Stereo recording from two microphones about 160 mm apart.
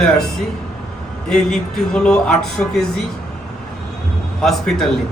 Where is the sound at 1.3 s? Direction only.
5° left (ahead or behind).